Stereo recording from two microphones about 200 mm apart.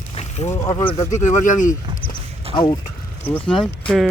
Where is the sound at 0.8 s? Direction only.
25° left (ahead or behind).